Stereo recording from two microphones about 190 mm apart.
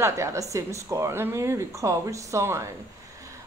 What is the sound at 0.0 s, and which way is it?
Speech, 15° right (ahead or behind).